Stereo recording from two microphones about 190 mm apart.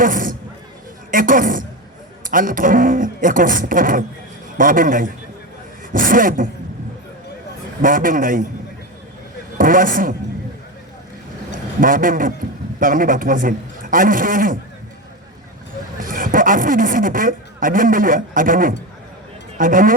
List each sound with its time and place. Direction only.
0.0 s a sound: 45° right (ahead or behind)
1.1 s speech: 45° right (ahead or behind)
7.8 s speech: 45° right (ahead or behind)
9.6 s speech: 45° right (ahead or behind)
11.5 s a man's voice: 45° right (ahead or behind)
16.0 s speech: 45° right (ahead or behind)